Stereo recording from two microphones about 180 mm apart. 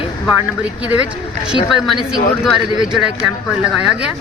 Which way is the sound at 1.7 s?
Centre (ahead or behind).